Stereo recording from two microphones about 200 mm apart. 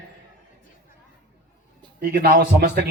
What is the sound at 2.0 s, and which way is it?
Speech, 50° right (ahead or behind).